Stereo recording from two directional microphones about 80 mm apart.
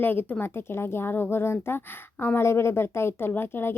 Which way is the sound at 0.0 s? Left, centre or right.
Left.